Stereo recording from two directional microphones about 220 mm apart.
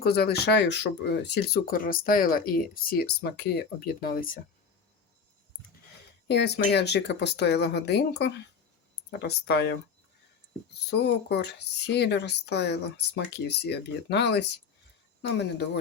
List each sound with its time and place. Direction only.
0.0 s speech: 45° left (ahead or behind)
6.2 s speech: 50° left (ahead or behind)
10.9 s speech: 50° left (ahead or behind)